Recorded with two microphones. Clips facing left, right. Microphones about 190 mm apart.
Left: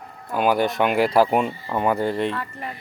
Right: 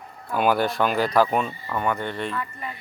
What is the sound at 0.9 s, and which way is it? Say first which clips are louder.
Speech: left 4 dB; 25° left (ahead or behind).